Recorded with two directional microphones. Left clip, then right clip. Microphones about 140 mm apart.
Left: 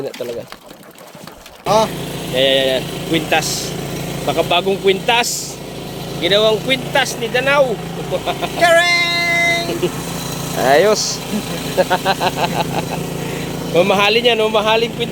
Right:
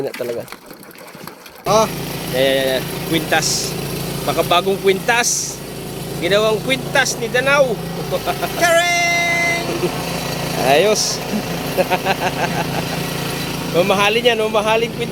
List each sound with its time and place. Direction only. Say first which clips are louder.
1.6 s speech: left 1 dB; 5° left (ahead or behind)
8.1 s vehicle: left 1 dB; 5° left (ahead or behind)
10.1 s lawn mower: right 2 dB; 10° left (ahead or behind)
11.8 s speech: left 2 dB; 15° left (ahead or behind)
13.7 s speech: left 2 dB; 35° left (ahead or behind)